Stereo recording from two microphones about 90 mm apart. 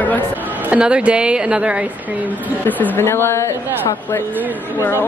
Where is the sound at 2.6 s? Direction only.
20° left (ahead or behind).